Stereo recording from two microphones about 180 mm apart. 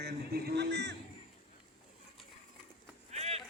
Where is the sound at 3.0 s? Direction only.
35° right (ahead or behind).